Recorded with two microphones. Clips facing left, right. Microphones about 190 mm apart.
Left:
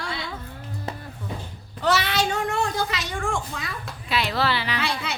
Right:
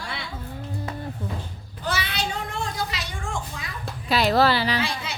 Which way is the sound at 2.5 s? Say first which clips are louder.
Left 4 dB; 65° left (ahead or behind).